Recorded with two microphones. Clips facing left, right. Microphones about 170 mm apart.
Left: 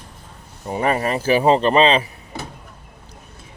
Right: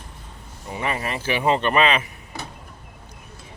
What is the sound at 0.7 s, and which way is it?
Speech, 40° left (ahead or behind).